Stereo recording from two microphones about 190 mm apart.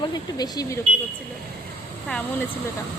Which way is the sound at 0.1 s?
20° left (ahead or behind).